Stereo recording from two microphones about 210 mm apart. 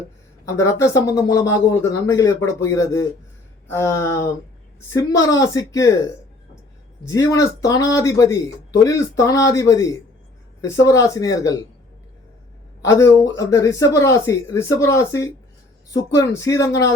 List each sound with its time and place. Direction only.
0.4 s speech: 15° left (ahead or behind)
7.0 s speech: 15° left (ahead or behind)
12.8 s speech: 15° left (ahead or behind)